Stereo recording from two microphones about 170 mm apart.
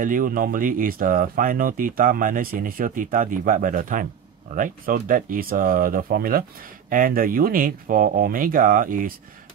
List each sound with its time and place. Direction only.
0.0 s speech: 55° right (ahead or behind)